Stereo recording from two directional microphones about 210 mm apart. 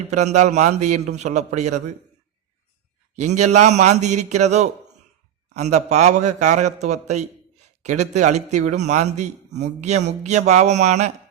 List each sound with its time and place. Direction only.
0.1 s a man's voice: 35° right (ahead or behind)
3.2 s a man's voice: 35° right (ahead or behind)